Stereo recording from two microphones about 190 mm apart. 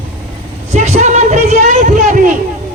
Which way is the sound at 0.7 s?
35° right (ahead or behind).